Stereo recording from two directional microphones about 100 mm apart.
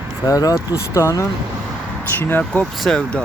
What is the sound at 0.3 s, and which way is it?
Speech, 35° left (ahead or behind).